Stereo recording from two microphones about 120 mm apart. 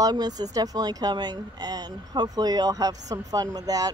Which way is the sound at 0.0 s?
35° right (ahead or behind).